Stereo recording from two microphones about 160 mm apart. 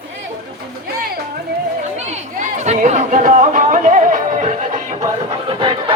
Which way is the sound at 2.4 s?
50° right (ahead or behind).